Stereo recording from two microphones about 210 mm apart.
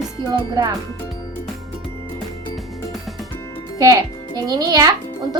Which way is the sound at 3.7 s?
15° right (ahead or behind).